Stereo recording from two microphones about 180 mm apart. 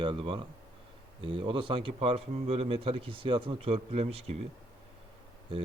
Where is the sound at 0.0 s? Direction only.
30° right (ahead or behind).